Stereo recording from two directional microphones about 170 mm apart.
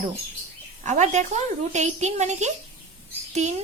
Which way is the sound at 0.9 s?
45° right (ahead or behind).